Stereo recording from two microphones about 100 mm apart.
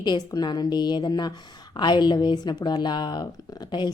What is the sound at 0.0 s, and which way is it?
A woman's voice, 45° left (ahead or behind).